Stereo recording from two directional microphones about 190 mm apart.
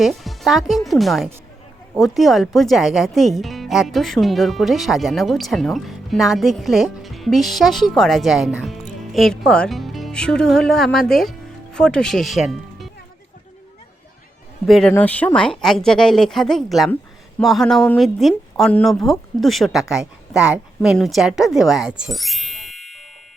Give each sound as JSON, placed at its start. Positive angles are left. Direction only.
{"t": 0.0, "sound": "speech", "side_deg": 0}
{"t": 14.7, "sound": "speech", "side_deg": 5}